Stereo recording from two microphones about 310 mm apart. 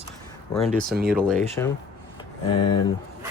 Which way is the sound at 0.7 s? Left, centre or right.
Right.